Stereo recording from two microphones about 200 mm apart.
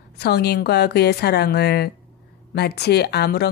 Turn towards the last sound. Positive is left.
turn(degrees=55)  # may be behind; listen again after turning